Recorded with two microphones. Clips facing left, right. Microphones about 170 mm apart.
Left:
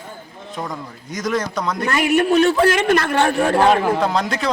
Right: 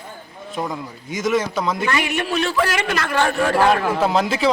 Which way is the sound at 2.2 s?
50° left (ahead or behind).